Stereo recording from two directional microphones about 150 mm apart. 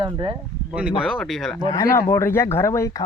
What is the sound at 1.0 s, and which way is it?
Speech, centre (ahead or behind).